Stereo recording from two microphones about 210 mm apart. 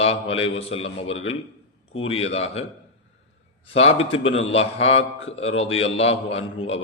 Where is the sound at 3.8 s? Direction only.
30° left (ahead or behind).